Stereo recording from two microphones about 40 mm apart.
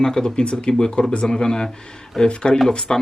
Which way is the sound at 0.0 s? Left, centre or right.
Centre.